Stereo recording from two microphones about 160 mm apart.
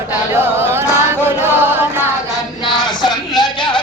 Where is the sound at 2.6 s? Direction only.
30° left (ahead or behind).